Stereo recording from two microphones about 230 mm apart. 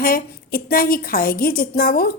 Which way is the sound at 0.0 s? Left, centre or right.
Left.